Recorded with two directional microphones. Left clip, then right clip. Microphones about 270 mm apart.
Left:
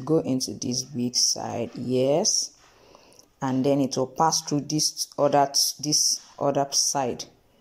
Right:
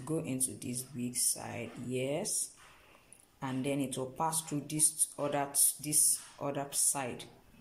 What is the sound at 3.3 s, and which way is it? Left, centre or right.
Speech, left.